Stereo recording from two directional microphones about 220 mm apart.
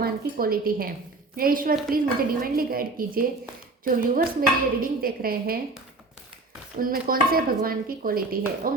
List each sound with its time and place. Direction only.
0.0 s a woman's voice: 40° right (ahead or behind)
6.7 s speech: 40° right (ahead or behind)